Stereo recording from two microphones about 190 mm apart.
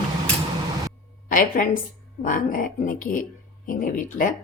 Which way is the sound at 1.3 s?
45° left (ahead or behind).